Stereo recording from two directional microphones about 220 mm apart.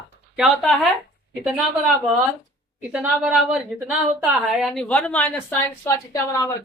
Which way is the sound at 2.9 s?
5° right (ahead or behind).